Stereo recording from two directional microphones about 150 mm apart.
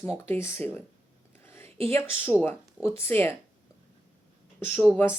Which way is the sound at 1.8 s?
15° left (ahead or behind).